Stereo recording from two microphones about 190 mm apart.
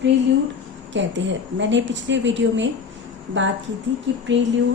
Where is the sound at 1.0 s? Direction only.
75° right (ahead or behind).